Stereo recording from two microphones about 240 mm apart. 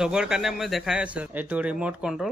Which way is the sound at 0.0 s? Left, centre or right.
Centre.